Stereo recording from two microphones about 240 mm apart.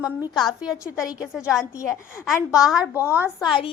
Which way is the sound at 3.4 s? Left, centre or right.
Left.